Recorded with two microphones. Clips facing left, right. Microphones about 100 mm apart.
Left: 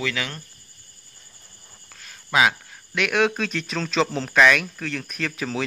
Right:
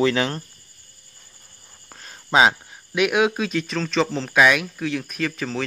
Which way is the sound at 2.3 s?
25° right (ahead or behind).